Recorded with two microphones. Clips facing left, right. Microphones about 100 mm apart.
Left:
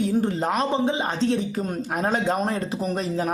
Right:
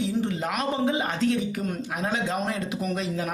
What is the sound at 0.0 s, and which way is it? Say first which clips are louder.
Speech: left 4 dB; 45° left (ahead or behind).